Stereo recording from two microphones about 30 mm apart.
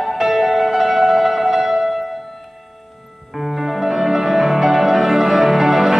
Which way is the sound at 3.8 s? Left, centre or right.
Centre.